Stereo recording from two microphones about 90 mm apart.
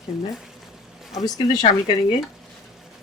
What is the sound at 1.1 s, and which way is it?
Speech, 45° left (ahead or behind).